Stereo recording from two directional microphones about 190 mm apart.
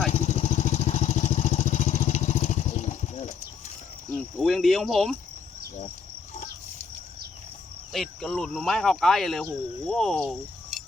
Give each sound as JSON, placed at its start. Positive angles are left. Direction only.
{"t": 0.1, "sound": "vehicle", "side_deg": 35}
{"t": 4.1, "sound": "cricket", "side_deg": 0}
{"t": 7.9, "sound": "speech", "side_deg": 0}